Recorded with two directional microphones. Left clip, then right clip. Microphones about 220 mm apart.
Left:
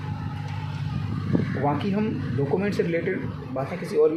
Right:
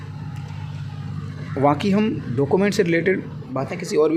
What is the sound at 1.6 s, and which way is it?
Speech, 40° right (ahead or behind).